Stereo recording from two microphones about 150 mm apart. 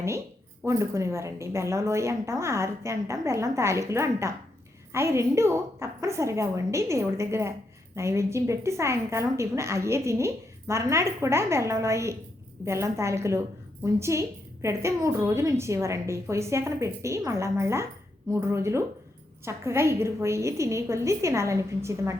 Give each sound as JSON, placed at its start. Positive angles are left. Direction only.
{"t": 0.6, "sound": "a woman's voice", "side_deg": -20}